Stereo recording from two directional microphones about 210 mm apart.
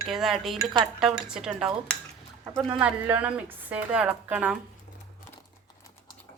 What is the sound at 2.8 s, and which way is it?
Speech, 5° right (ahead or behind).